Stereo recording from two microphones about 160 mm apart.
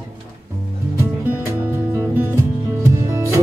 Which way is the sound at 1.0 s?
15° right (ahead or behind).